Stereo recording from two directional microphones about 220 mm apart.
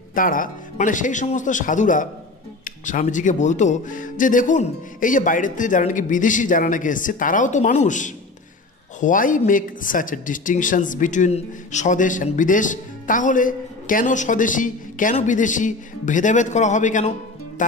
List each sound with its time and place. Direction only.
0.1 s speech: 40° left (ahead or behind)